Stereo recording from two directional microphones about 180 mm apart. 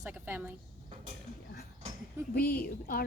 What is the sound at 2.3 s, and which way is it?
Speech, 55° left (ahead or behind).